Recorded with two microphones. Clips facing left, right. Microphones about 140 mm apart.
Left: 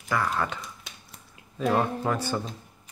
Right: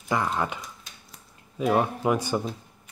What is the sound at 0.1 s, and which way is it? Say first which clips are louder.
Speech: right 1 dB; 20° right (ahead or behind).